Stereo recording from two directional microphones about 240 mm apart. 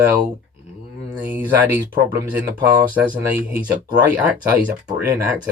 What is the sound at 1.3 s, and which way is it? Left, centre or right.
Speech, centre.